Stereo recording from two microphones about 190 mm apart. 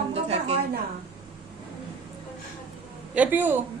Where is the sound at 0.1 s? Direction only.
35° right (ahead or behind).